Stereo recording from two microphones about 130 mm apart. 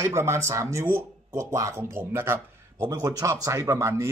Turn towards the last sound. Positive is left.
turn(degrees=-20)  # may be behind; listen again after turning